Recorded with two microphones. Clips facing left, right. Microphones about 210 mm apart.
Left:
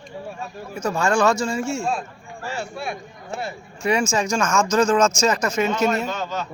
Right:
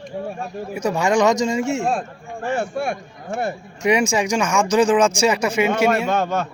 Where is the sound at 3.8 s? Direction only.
15° right (ahead or behind).